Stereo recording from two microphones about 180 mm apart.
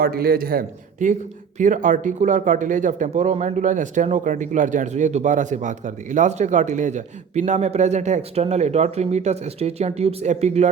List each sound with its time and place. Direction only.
0.0 s a man's voice: 55° right (ahead or behind); by 10.7 s 40° right (ahead or behind)